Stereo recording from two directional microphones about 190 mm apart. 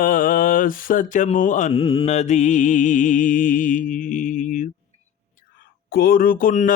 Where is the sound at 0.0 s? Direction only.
45° left (ahead or behind).